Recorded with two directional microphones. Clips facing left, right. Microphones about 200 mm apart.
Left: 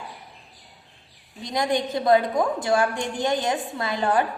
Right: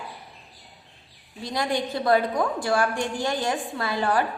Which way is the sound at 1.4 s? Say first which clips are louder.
Left 2 dB; 20° left (ahead or behind).